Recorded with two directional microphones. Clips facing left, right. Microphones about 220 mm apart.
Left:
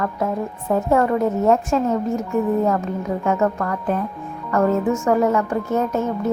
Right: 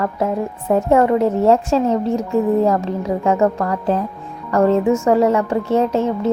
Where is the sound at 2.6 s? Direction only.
30° right (ahead or behind).